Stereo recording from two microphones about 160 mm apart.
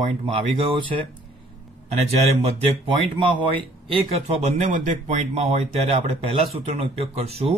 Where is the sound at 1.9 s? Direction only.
40° right (ahead or behind).